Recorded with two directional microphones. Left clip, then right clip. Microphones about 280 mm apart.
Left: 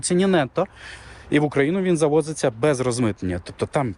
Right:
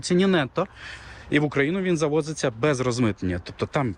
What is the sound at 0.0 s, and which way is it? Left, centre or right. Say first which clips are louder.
Speech: left 2 dB; centre.